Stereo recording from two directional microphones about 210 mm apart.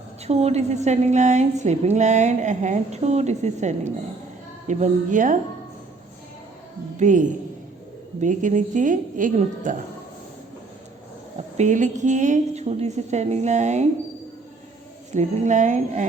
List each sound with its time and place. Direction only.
0.3 s a woman's voice: 30° right (ahead or behind)
6.9 s a woman's voice: 35° right (ahead or behind)
11.3 s a woman's voice: 35° right (ahead or behind)
15.1 s a woman's voice: 35° right (ahead or behind)